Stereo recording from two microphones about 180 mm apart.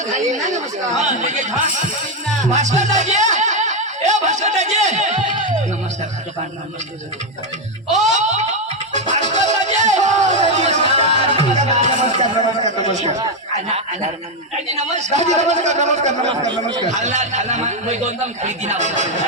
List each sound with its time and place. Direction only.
0.2 s a man's voice: 40° right (ahead or behind)
2.5 s music: 40° right (ahead or behind)
7.9 s music: 40° right (ahead or behind)
14.8 s a man's voice: 40° right (ahead or behind)